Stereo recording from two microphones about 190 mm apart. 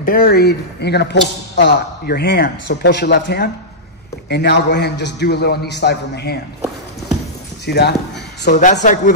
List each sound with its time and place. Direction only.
0.0 s speech: 50° left (ahead or behind)
7.6 s speech: 60° left (ahead or behind)
8.5 s speech: 40° left (ahead or behind)